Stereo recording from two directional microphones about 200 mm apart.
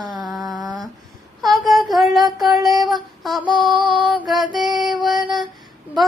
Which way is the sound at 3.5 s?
Centre (ahead or behind).